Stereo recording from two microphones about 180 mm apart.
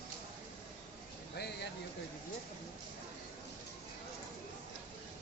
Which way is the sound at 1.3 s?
65° left (ahead or behind).